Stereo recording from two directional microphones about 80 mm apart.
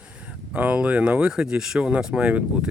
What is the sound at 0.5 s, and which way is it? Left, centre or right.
Speech, centre.